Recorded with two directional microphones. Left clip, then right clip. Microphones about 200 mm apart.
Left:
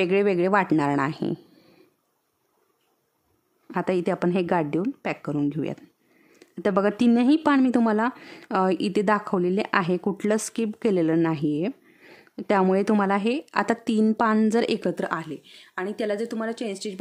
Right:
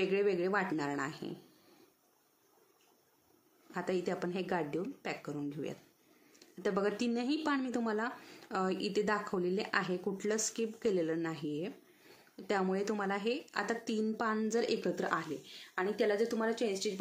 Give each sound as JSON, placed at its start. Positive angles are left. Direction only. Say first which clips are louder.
{"t": 0.0, "sound": "speech", "louder": "left 10 dB", "side_deg": 55}
{"t": 3.7, "sound": "speech", "louder": "left 11 dB", "side_deg": 50}